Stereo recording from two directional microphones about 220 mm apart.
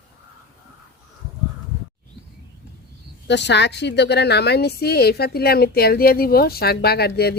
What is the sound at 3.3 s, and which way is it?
A woman's voice, 50° left (ahead or behind).